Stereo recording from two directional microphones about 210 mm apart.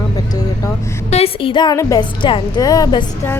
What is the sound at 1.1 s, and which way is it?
A woman's voice, 25° left (ahead or behind).